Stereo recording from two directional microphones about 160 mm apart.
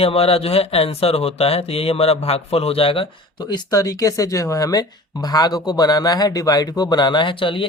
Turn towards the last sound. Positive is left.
turn(degrees=30)  # may be behind; listen again after turning